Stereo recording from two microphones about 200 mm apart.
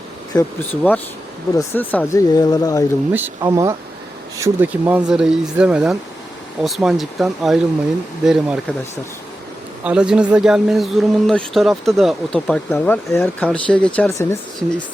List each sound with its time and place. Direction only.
0.3 s speech: 10° left (ahead or behind)
3.1 s speech: 10° right (ahead or behind)
9.8 s speech: 5° right (ahead or behind); by 14.3 s 15° left (ahead or behind)